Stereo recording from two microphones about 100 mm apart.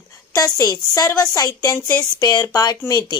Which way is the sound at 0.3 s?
40° left (ahead or behind).